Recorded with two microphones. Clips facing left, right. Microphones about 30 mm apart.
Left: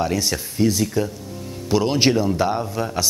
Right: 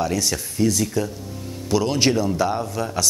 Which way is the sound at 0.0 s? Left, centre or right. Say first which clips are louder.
Left 1 dB; centre.